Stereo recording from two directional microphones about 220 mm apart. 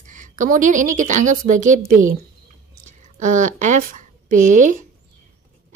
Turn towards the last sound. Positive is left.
turn(degrees=-35)  # may be behind; listen again after turning